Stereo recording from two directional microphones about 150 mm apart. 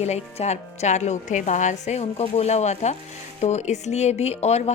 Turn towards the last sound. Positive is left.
turn(degrees=45)  # may be behind; listen again after turning